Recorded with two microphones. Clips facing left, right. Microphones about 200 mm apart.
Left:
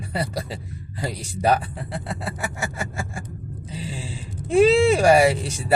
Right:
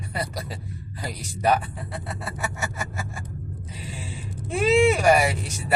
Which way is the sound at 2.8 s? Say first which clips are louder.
Left 3 dB; 30° left (ahead or behind).